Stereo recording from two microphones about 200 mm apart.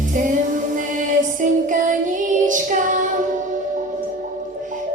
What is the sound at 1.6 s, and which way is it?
Child singing, 40° right (ahead or behind).